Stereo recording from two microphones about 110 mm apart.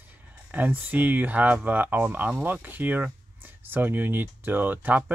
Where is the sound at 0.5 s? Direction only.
15° right (ahead or behind).